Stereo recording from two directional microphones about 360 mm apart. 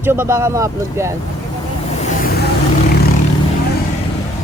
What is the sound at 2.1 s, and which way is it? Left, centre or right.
Vehicle, left.